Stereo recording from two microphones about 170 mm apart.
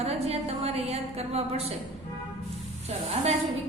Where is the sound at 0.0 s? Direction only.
35° right (ahead or behind).